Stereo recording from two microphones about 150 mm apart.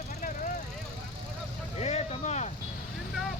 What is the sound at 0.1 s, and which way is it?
Vehicle, 60° left (ahead or behind).